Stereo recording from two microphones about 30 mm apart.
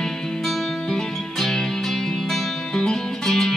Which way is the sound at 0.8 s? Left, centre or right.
Centre.